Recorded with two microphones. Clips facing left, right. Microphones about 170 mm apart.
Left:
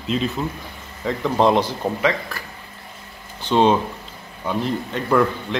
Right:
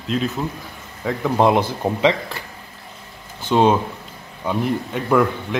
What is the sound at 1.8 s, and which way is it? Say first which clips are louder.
Speech: right 3 dB; 25° right (ahead or behind).